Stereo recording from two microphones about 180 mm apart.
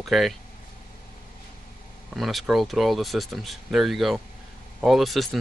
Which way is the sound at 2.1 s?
Centre (ahead or behind).